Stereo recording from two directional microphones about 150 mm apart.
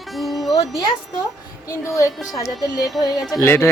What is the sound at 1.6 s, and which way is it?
A woman's voice, 20° left (ahead or behind).